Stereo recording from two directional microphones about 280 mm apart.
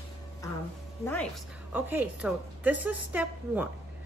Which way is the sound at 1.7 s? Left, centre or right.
Centre.